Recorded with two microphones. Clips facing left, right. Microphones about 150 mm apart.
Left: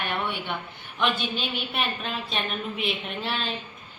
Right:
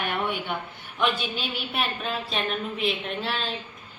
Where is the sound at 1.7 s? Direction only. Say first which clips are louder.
Right 4 dB; centre (ahead or behind).